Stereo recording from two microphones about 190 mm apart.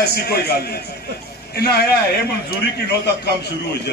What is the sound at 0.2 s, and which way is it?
Speech, 55° left (ahead or behind).